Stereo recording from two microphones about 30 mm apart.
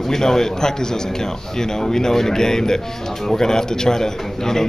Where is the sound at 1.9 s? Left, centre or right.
Centre.